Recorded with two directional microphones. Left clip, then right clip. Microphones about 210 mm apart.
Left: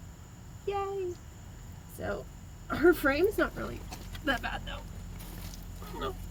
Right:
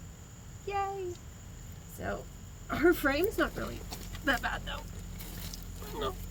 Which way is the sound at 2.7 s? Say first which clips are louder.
Left 2 dB; 5° right (ahead or behind).